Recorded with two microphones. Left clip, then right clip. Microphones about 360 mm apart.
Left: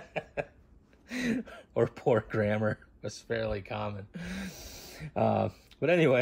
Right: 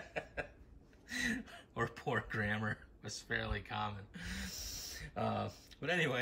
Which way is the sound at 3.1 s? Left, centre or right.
Right.